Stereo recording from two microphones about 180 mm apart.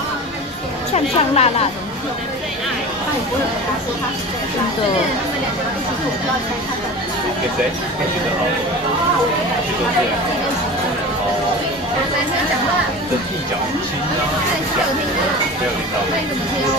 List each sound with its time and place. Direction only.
0.9 s a woman's voice: 35° left (ahead or behind)